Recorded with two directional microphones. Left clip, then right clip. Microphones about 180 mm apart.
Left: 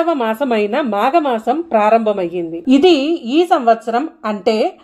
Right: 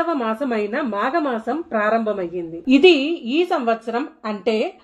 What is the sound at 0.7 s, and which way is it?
A woman's voice, 25° left (ahead or behind).